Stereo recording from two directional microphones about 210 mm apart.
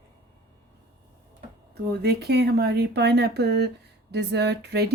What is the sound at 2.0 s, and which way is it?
Speech, 50° right (ahead or behind).